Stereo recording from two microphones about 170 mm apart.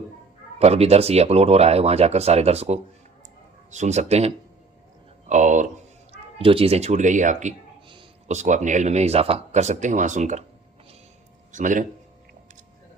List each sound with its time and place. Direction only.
0.6 s speech: 40° right (ahead or behind)
5.3 s speech: 45° right (ahead or behind)
6.4 s speech: 35° right (ahead or behind)
11.5 s speech: 50° right (ahead or behind)